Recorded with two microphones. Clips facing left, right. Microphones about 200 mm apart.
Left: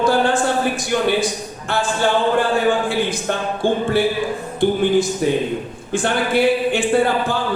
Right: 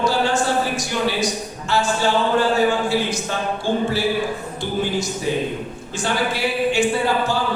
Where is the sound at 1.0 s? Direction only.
55° left (ahead or behind).